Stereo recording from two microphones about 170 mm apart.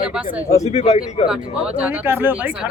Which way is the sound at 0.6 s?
40° left (ahead or behind).